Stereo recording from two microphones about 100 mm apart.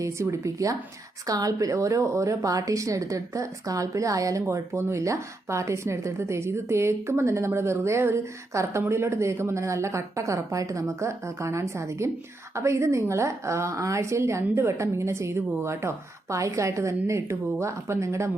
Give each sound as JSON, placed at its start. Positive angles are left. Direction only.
{"t": 0.0, "sound": "speech", "side_deg": -30}